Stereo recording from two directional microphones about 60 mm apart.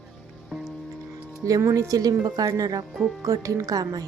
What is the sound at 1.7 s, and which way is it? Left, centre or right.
A woman's voice, right.